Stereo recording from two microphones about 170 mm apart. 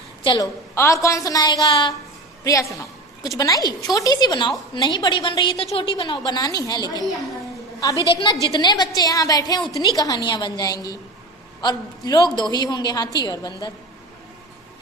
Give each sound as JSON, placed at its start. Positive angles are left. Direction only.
{"t": 0.2, "sound": "a woman's voice", "side_deg": 25}
{"t": 8.1, "sound": "a woman's voice", "side_deg": 30}